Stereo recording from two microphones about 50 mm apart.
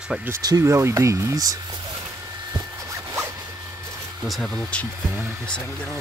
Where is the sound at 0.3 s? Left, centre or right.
Right.